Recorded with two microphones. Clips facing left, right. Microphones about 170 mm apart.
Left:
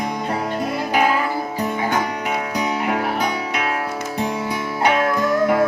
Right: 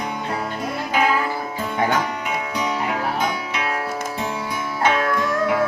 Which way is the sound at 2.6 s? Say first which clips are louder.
Left 2 dB; 50° left (ahead or behind).